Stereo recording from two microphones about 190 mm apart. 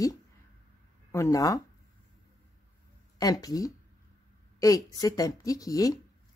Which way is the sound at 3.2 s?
20° left (ahead or behind).